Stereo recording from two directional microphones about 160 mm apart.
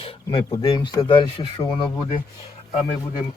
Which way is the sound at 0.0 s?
35° left (ahead or behind).